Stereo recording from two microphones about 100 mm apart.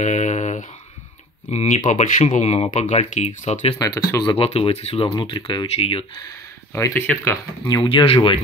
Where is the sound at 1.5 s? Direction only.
90° left.